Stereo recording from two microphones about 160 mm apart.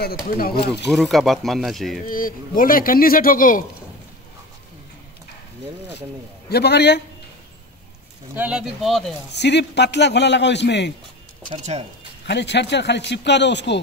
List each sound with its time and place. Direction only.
0.4 s speech: 70° left (ahead or behind)
0.8 s speech: centre (ahead or behind)
2.0 s speech: 60° left (ahead or behind)
6.5 s a man's voice: 90° left
8.4 s speech: 5° right (ahead or behind)
9.3 s a man's voice: 90° left
12.3 s a man's voice: 90° left